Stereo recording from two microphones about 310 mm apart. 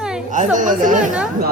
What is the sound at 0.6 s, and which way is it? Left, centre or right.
Speech, right.